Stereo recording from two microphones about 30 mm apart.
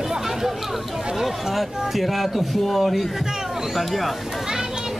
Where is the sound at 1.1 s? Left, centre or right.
Centre.